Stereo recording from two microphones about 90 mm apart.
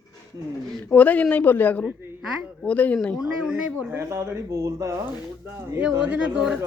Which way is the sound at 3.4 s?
15° right (ahead or behind).